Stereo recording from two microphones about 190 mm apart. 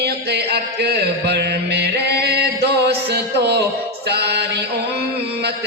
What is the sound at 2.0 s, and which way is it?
Chant, 60° right (ahead or behind).